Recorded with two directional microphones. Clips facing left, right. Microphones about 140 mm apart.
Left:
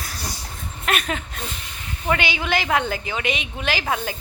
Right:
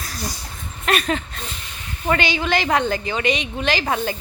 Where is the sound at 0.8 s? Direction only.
5° left (ahead or behind).